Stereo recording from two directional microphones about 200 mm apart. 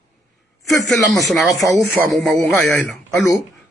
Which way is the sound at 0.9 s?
Centre (ahead or behind).